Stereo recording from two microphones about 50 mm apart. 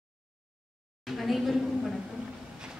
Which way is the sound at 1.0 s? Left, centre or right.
Centre.